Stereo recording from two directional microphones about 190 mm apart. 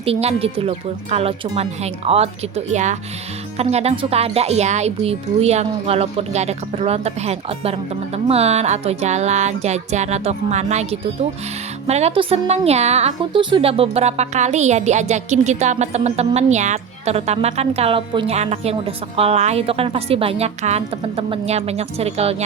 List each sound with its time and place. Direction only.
0.0 s a woman's voice: 30° right (ahead or behind)